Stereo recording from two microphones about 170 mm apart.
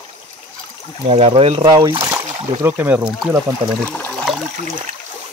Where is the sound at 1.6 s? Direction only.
20° right (ahead or behind).